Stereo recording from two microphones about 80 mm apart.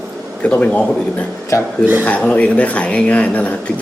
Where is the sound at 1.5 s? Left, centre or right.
Left.